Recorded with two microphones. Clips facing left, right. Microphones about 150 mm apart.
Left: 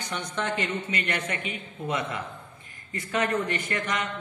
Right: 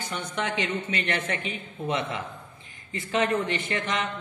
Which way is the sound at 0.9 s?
30° right (ahead or behind).